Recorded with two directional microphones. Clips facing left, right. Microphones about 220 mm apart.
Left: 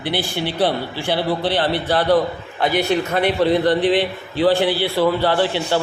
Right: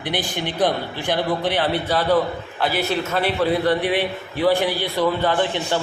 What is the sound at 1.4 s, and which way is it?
A man's voice, 10° right (ahead or behind).